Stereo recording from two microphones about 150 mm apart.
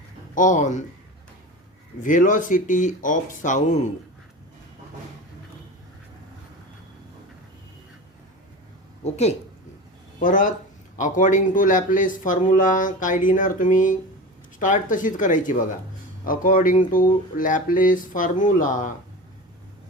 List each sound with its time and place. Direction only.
0.3 s speech: 55° left (ahead or behind)
2.0 s speech: 60° left (ahead or behind)
9.0 s a woman's voice: 45° left (ahead or behind)
10.2 s speech: 60° left (ahead or behind)